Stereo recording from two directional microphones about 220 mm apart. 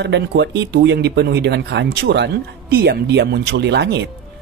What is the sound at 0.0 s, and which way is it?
Speech, 50° right (ahead or behind).